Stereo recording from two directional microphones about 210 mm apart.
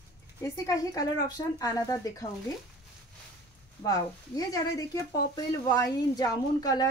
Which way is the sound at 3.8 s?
15° left (ahead or behind).